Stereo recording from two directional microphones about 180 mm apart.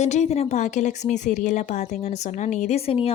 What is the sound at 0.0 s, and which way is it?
A woman's voice, 40° left (ahead or behind).